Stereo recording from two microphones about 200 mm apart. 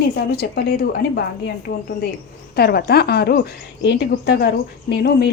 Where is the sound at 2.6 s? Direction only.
50° left (ahead or behind).